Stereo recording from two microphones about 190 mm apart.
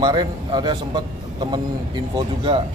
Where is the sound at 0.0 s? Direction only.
25° right (ahead or behind).